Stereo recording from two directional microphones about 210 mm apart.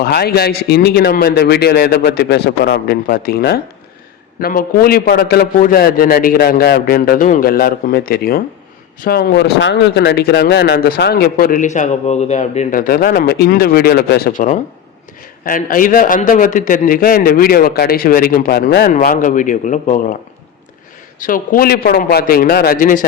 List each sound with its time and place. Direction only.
0.0 s a man's voice: 50° left (ahead or behind)
21.2 s speech: 40° left (ahead or behind)